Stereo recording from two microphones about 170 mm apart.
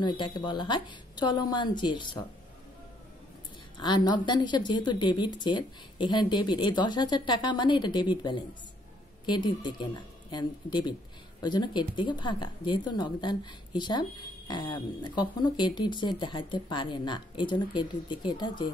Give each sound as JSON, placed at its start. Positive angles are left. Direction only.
{"t": 0.0, "sound": "speech", "side_deg": 25}
{"t": 3.8, "sound": "speech", "side_deg": 25}